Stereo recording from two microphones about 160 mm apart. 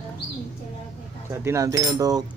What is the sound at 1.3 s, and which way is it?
Speech, 20° right (ahead or behind).